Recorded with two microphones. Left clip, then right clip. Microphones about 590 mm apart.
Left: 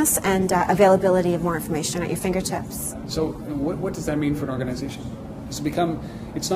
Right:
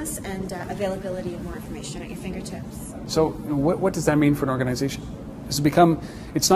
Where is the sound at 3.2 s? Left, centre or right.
Right.